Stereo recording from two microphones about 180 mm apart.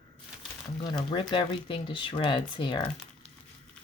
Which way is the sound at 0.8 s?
25° left (ahead or behind).